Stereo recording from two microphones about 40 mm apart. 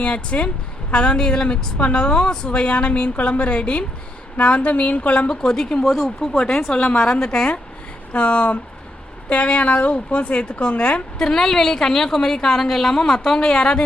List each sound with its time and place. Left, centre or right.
0.0 s a woman's voice: left
5.3 s a woman's voice: centre
5.8 s a woman's voice: centre
8.1 s a woman's voice: left
11.2 s a woman's voice: centre